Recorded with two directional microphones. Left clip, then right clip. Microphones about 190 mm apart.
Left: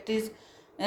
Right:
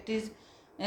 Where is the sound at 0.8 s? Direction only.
35° left (ahead or behind).